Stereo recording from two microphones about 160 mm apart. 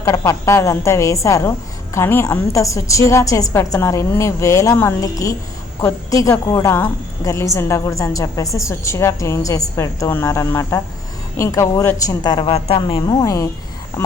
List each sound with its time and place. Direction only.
0.0 s a woman's voice: 20° left (ahead or behind)